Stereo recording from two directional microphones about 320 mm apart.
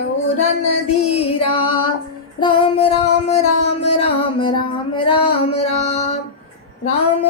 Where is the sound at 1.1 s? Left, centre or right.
Centre.